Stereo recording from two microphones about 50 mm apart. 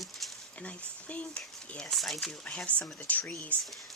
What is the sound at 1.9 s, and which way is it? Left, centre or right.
Speech, centre.